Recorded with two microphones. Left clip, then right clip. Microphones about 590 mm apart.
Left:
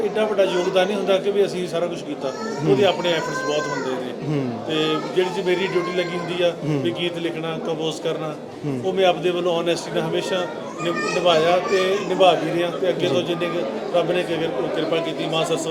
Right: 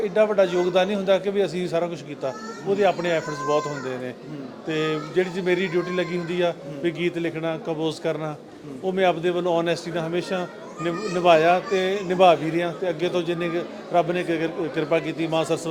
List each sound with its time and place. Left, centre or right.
0.2 s speech: right
2.8 s speech: right
4.7 s a man's voice: right